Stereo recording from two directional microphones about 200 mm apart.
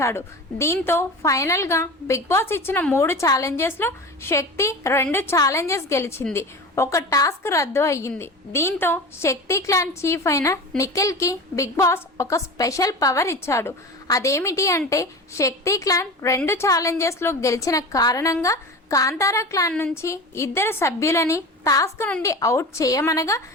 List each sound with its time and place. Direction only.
0.0 s a woman's voice: 15° left (ahead or behind)